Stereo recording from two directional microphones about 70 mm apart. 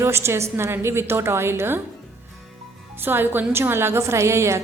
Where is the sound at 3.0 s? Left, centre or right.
Right.